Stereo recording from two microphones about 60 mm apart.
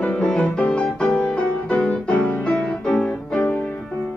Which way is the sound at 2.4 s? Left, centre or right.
Centre.